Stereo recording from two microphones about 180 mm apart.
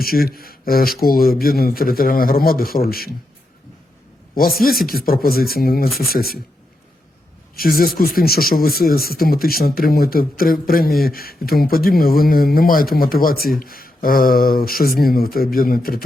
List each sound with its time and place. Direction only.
0.0 s speech: 55° left (ahead or behind)
4.9 s speech: 55° left (ahead or behind)
7.5 s speech: 55° left (ahead or behind)